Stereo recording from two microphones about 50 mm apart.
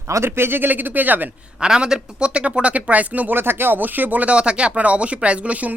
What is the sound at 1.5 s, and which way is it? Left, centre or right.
Speech, centre.